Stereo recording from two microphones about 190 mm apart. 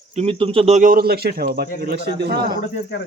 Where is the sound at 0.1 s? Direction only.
30° right (ahead or behind); by 2.6 s 60° right (ahead or behind).